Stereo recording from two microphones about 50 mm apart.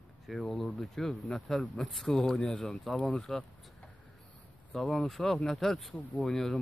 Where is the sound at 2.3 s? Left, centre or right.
Centre.